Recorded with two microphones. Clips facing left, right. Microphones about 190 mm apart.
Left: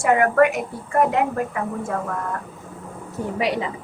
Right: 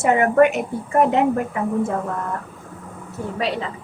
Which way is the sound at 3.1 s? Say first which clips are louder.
Left 1 dB; 15° left (ahead or behind).